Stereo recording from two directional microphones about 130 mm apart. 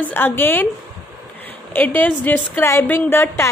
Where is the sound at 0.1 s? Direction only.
15° left (ahead or behind).